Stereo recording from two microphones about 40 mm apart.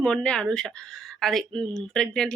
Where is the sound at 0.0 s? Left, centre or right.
Left.